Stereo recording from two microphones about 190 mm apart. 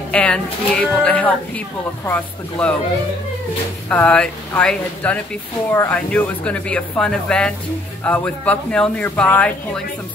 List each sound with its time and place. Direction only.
0.1 s speech: 5° left (ahead or behind)
3.9 s speech: 5° left (ahead or behind)